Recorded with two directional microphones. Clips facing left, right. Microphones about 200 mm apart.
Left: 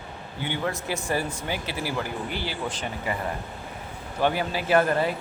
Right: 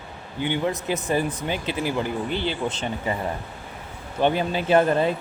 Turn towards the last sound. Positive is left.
turn(degrees=-25)  # may be behind; listen again after turning